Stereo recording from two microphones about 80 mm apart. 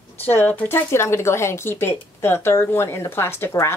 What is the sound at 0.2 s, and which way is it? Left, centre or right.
Speech, left.